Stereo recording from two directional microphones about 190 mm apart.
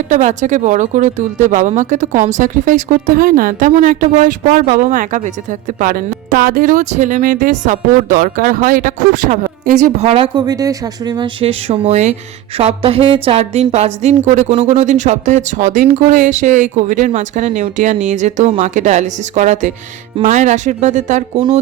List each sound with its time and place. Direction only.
0.1 s speech: 40° right (ahead or behind)
21.3 s a woman's voice: 25° right (ahead or behind)